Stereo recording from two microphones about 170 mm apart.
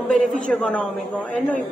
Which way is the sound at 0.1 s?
5° left (ahead or behind).